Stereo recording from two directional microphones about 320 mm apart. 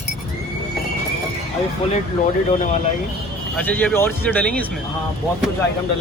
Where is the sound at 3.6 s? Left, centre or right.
Centre.